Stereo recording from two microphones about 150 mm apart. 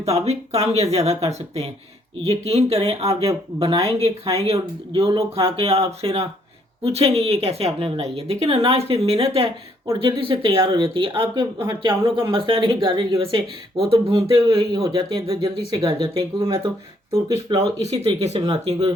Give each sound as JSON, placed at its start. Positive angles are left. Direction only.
{"t": 0.0, "sound": "speech", "side_deg": -45}
{"t": 17.1, "sound": "speech", "side_deg": -25}
{"t": 18.2, "sound": "speech", "side_deg": -45}
{"t": 18.7, "sound": "speech", "side_deg": -25}